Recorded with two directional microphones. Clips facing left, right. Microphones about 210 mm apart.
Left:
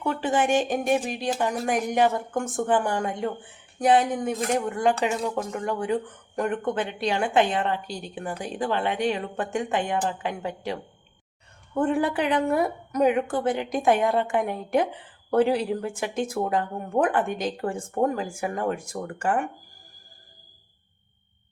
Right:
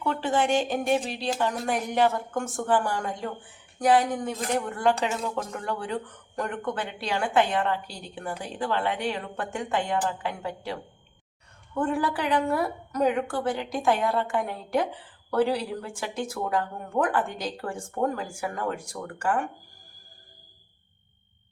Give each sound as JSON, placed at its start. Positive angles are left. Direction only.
{"t": 0.0, "sound": "speech", "side_deg": 15}